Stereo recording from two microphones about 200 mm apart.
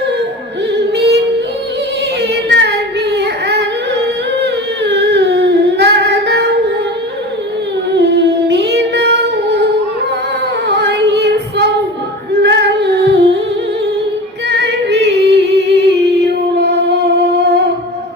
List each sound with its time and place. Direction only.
0.9 s music: 55° right (ahead or behind)
2.2 s singing: 55° right (ahead or behind)
4.4 s humming: 55° right (ahead or behind)
7.9 s singing: 60° right (ahead or behind)
10.7 s female singing: 60° right (ahead or behind)
14.6 s singing: 55° right (ahead or behind)
16.6 s a sound: 55° right (ahead or behind)